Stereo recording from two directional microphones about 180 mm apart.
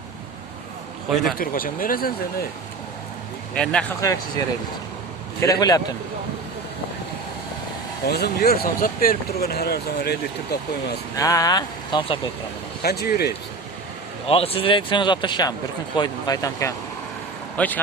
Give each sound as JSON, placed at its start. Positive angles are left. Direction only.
{"t": 1.4, "sound": "speech", "side_deg": 50}
{"t": 3.5, "sound": "speech", "side_deg": 5}
{"t": 4.0, "sound": "speech", "side_deg": 20}
{"t": 8.0, "sound": "speech", "side_deg": 60}
{"t": 11.1, "sound": "speech", "side_deg": 20}
{"t": 12.8, "sound": "speech", "side_deg": 60}
{"t": 14.3, "sound": "speech", "side_deg": 30}
{"t": 17.6, "sound": "speech", "side_deg": 5}